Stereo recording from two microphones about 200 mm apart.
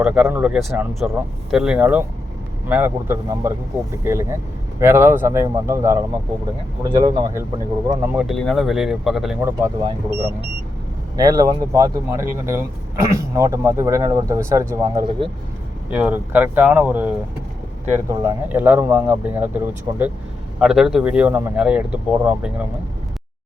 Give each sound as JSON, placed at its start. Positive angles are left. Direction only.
{"t": 0.0, "sound": "speech", "side_deg": -5}
{"t": 8.0, "sound": "speech", "side_deg": -5}
{"t": 9.4, "sound": "speech", "side_deg": -10}
{"t": 9.8, "sound": "speech", "side_deg": -30}
{"t": 11.2, "sound": "speech", "side_deg": -20}
{"t": 18.1, "sound": "speech", "side_deg": -15}